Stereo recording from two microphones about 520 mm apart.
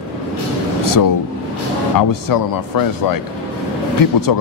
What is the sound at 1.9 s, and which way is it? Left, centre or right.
Speech, left.